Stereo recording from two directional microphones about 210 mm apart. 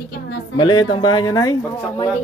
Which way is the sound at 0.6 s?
20° left (ahead or behind).